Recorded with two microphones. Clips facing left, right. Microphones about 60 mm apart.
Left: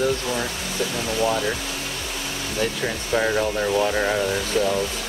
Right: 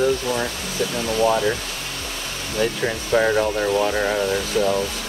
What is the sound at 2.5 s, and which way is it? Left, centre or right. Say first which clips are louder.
Speech: right 3 dB; centre.